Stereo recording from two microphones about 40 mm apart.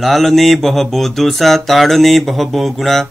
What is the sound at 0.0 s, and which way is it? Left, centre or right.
Mantra, centre.